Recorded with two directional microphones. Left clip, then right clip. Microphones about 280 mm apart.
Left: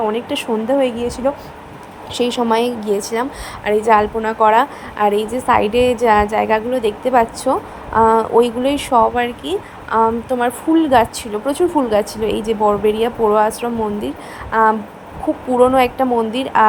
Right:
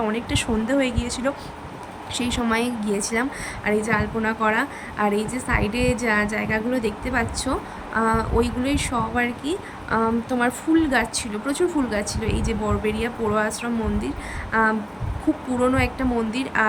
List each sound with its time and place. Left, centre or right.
0.0 s a woman's voice: centre